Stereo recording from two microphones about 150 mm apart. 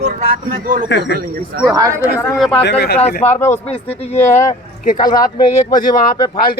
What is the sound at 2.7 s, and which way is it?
Speech, 90° left.